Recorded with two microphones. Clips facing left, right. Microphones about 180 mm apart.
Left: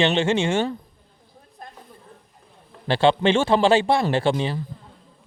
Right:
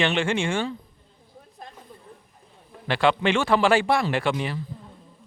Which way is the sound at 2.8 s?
30° left (ahead or behind).